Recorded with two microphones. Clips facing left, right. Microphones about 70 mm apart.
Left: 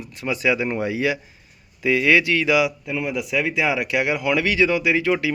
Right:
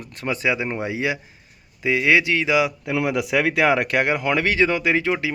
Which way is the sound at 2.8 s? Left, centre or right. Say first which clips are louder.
Right 3 dB; right.